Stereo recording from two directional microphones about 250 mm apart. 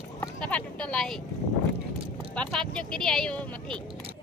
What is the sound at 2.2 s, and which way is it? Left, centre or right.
Speech, centre.